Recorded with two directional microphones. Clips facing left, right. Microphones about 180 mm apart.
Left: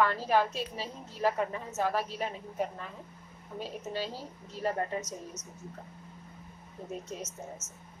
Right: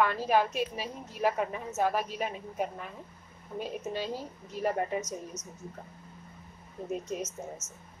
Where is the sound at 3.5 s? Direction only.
15° right (ahead or behind).